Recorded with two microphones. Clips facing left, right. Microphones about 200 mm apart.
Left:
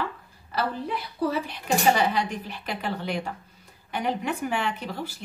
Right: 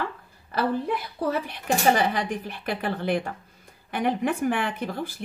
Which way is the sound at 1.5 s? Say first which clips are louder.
Right 2 dB; 50° right (ahead or behind).